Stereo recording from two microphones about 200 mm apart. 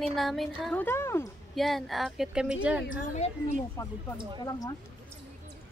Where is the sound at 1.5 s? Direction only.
Centre (ahead or behind).